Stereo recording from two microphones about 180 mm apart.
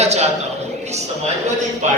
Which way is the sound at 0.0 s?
40° right (ahead or behind).